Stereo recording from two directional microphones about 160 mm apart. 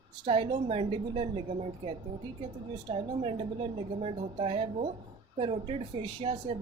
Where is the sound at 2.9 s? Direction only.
35° right (ahead or behind).